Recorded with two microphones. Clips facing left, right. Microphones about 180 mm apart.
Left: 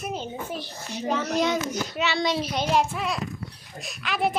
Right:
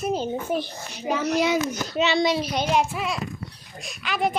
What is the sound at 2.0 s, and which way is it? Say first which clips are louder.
Speech: right 6 dB; 20° right (ahead or behind).